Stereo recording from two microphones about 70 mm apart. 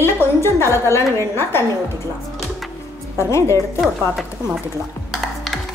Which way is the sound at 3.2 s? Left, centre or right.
Left.